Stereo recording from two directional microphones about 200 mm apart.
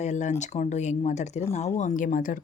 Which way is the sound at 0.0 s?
35° left (ahead or behind).